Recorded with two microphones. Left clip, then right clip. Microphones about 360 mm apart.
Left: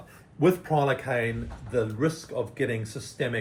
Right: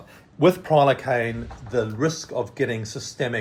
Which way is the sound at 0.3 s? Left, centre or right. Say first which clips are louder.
Right 6 dB; right.